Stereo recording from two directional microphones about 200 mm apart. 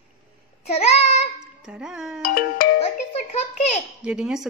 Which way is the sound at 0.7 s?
30° left (ahead or behind).